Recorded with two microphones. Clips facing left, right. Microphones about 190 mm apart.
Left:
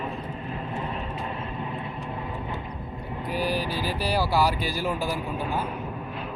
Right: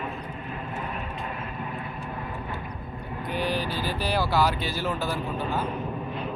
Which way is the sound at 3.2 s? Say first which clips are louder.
Left 1 dB; 5° left (ahead or behind).